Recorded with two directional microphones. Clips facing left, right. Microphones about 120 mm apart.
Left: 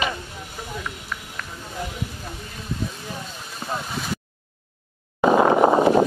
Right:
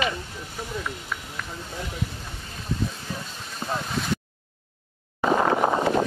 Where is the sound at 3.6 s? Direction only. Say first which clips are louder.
Right 1 dB; 5° left (ahead or behind).